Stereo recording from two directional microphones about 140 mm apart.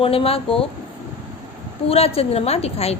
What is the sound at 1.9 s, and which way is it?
A woman's voice, 45° left (ahead or behind).